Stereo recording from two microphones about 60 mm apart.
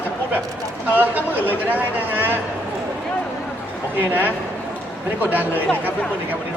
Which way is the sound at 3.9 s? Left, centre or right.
Right.